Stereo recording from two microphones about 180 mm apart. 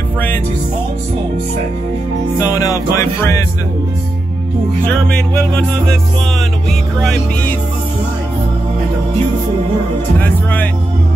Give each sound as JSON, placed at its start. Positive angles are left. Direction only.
{"t": 2.3, "sound": "music", "side_deg": 20}
{"t": 4.8, "sound": "music", "side_deg": 5}
{"t": 7.0, "sound": "music", "side_deg": 5}
{"t": 10.2, "sound": "speech", "side_deg": 10}